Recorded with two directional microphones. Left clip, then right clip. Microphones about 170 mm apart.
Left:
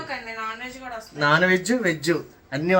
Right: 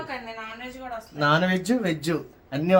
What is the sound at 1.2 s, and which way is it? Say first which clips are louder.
Speech: left 3 dB; 5° left (ahead or behind).